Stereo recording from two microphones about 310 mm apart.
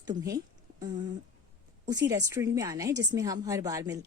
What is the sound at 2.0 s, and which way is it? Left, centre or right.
A woman's voice, centre.